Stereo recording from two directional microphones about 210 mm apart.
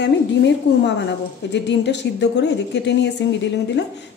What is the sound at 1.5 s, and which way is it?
A woman's voice, 55° left (ahead or behind).